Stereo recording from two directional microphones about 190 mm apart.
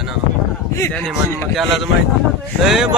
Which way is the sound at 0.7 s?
15° left (ahead or behind).